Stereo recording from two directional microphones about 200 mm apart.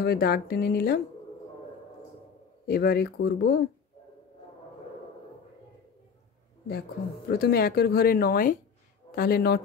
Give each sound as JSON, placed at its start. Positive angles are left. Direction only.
{"t": 0.0, "sound": "speech", "side_deg": 50}
{"t": 2.6, "sound": "speech", "side_deg": 50}
{"t": 7.2, "sound": "speech", "side_deg": 50}